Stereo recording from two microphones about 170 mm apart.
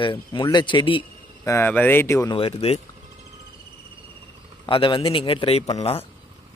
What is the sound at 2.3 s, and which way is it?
Speech, 35° left (ahead or behind).